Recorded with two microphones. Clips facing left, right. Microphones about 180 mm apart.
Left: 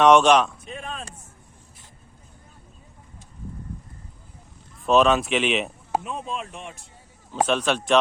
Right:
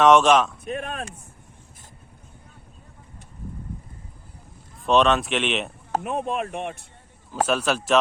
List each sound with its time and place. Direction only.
0.0 s speech: centre (ahead or behind)
0.6 s a sound: 60° right (ahead or behind)
4.8 s speech: centre (ahead or behind)
6.0 s speech: 60° right (ahead or behind)
7.4 s speech: 5° right (ahead or behind)